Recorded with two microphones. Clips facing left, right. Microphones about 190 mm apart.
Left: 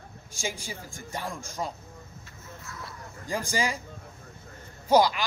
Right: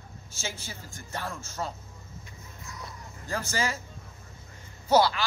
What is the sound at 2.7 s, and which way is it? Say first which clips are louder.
Dog: even; 20° right (ahead or behind).